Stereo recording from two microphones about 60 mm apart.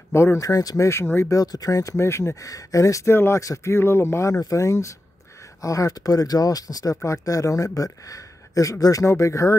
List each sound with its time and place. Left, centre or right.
0.1 s speech: left
0.4 s speech: left
0.8 s speech: left
1.3 s speech: left
2.0 s speech: left
2.4 s speech: left
3.1 s speech: left
3.3 s speech: left
3.7 s speech: left
4.3 s speech: left
7.1 s speech: left
9.1 s speech: left